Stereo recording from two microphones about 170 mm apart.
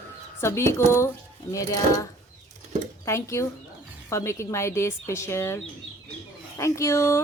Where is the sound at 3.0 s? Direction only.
15° left (ahead or behind).